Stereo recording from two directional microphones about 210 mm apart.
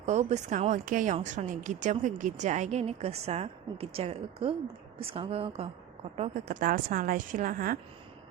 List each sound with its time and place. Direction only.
0.0 s speech: 35° right (ahead or behind)